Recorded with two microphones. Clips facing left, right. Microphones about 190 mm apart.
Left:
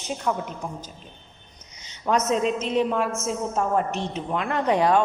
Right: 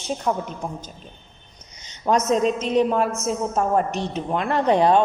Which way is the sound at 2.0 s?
40° right (ahead or behind).